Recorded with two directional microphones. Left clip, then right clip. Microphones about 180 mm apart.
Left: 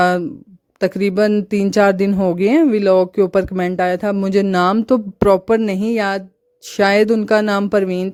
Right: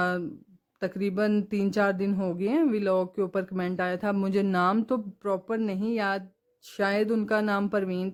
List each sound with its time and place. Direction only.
0.0 s speech: 50° left (ahead or behind)